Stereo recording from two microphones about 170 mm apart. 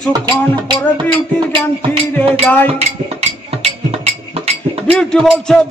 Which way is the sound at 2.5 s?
10° left (ahead or behind).